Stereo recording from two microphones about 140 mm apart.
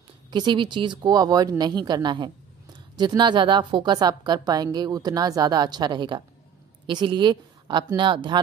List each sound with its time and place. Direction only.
0.3 s a woman's voice: 35° right (ahead or behind)